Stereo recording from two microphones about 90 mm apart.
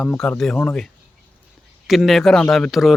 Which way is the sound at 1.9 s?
Centre (ahead or behind).